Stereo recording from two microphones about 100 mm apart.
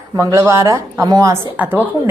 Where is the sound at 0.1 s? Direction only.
30° right (ahead or behind).